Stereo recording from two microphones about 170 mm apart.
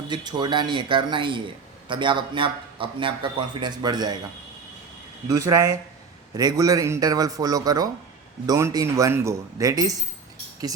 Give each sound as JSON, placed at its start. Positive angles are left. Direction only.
{"t": 0.1, "sound": "a man's voice", "side_deg": -25}
{"t": 6.3, "sound": "a man's voice", "side_deg": -20}